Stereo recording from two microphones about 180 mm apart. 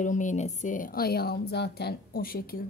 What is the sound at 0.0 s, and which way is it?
A woman's voice, 45° left (ahead or behind).